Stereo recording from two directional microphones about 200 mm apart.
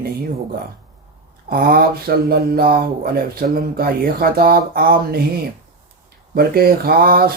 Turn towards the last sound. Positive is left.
turn(degrees=-50)  # may be behind; listen again after turning